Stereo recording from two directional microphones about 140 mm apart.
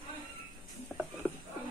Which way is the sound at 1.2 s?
15° left (ahead or behind).